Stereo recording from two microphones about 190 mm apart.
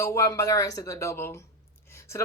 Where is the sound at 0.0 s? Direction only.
15° left (ahead or behind).